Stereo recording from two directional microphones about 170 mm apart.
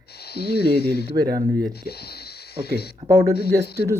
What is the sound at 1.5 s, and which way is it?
Speech, 20° right (ahead or behind).